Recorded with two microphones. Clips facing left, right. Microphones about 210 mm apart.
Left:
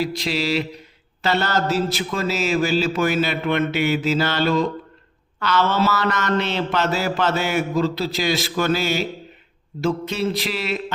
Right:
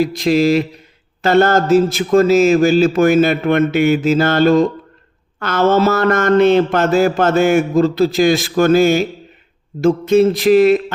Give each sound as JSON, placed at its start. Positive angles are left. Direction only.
{"t": 0.0, "sound": "mantra", "side_deg": -50}